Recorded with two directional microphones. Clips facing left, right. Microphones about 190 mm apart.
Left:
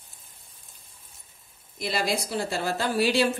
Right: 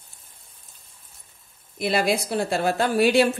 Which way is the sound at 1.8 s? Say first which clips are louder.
Right 5 dB; 60° right (ahead or behind).